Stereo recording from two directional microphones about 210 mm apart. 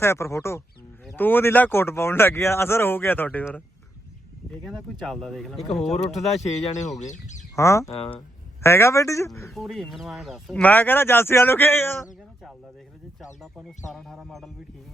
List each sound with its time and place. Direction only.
0.0 s speech: 10° left (ahead or behind)
6.1 s speech: 30° left (ahead or behind)
7.5 s speech: 15° left (ahead or behind)
9.5 s speech: centre (ahead or behind)
13.4 s speech: centre (ahead or behind)